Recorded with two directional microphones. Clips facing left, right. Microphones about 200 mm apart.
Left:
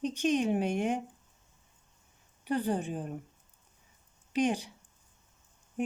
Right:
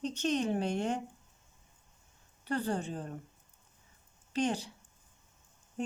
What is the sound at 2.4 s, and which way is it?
Speech, 15° left (ahead or behind).